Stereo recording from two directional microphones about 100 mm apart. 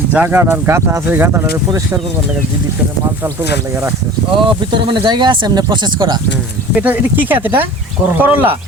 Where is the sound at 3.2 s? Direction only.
25° right (ahead or behind).